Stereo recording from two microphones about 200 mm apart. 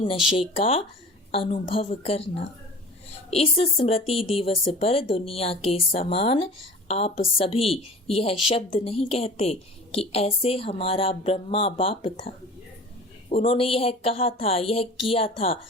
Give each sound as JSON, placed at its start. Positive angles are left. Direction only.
{"t": 0.3, "sound": "speech", "side_deg": 30}
{"t": 13.3, "sound": "speech", "side_deg": 30}